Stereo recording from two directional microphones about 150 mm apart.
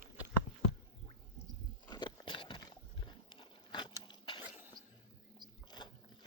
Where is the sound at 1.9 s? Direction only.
30° left (ahead or behind).